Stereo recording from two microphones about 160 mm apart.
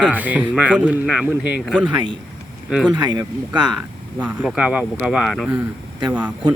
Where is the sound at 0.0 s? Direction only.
10° right (ahead or behind).